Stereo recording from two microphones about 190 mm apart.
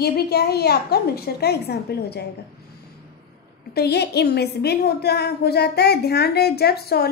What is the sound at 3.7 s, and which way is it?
A woman's voice, 60° left (ahead or behind).